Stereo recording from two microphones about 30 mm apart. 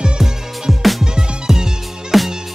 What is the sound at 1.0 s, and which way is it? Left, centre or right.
Music, right.